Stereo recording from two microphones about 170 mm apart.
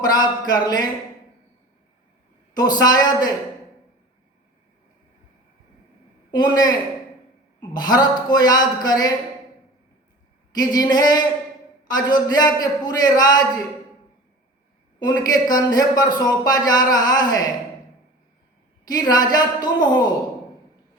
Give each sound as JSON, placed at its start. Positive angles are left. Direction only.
{"t": 0.1, "sound": "speech", "side_deg": 25}
{"t": 2.6, "sound": "speech", "side_deg": 25}
{"t": 6.3, "sound": "speech", "side_deg": 25}
{"t": 10.5, "sound": "speech", "side_deg": 25}
{"t": 14.9, "sound": "speech", "side_deg": 25}
{"t": 18.9, "sound": "speech", "side_deg": 25}